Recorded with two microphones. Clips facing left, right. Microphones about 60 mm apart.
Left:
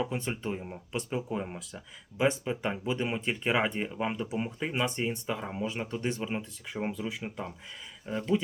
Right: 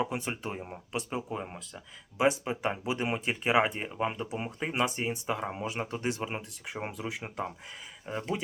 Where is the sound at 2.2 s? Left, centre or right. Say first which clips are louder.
Right 1 dB; centre.